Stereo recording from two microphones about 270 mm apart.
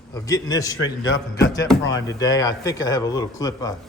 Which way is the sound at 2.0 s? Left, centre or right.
Centre.